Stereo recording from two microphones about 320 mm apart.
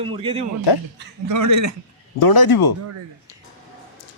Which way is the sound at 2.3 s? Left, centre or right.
Left.